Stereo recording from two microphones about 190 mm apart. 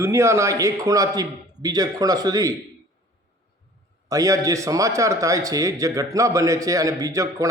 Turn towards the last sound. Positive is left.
turn(degrees=-15)  # may be behind; listen again after turning